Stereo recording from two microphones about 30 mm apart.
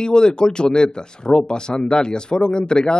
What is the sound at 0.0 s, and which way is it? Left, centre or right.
Speech, left.